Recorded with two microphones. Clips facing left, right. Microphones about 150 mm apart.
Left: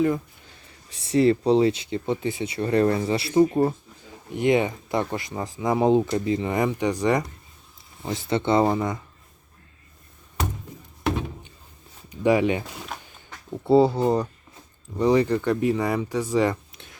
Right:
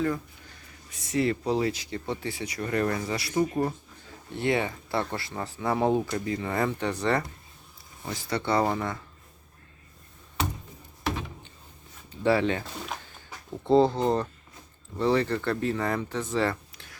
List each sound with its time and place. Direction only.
0.9 s speech: 30° left (ahead or behind)
4.3 s speech: 15° left (ahead or behind)
12.2 s speech: 15° left (ahead or behind)
13.7 s speech: 10° left (ahead or behind)